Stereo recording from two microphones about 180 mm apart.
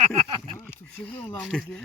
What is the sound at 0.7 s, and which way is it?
Speech, 10° left (ahead or behind).